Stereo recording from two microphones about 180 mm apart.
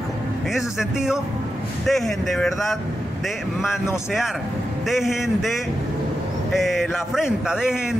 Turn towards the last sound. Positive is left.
turn(degrees=-5)  # may be behind; listen again after turning